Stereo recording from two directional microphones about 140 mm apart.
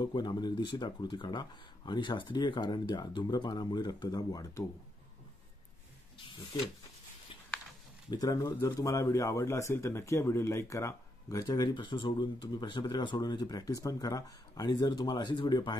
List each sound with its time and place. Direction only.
0.0 s speech: 30° left (ahead or behind)
8.1 s speech: 25° left (ahead or behind)
11.4 s speech: 30° left (ahead or behind)